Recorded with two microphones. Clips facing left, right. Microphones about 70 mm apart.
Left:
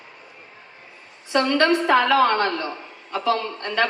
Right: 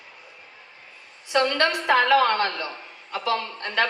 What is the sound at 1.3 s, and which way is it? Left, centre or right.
A woman's voice, left.